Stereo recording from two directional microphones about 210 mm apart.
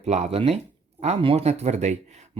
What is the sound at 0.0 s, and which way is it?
Speech, 30° right (ahead or behind).